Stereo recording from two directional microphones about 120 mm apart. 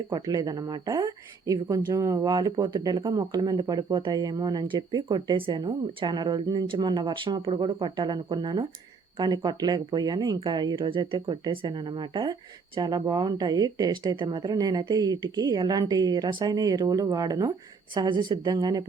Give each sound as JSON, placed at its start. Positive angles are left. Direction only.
{"t": 0.1, "sound": "a woman's voice", "side_deg": -30}